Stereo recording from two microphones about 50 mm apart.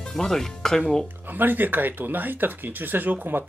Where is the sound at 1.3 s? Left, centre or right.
Right.